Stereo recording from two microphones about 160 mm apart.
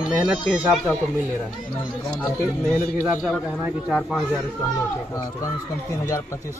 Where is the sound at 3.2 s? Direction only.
5° right (ahead or behind).